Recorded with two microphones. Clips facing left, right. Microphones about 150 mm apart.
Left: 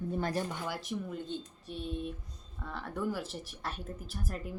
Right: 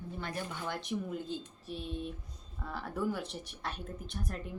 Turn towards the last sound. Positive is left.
turn(degrees=5)  # may be behind; listen again after turning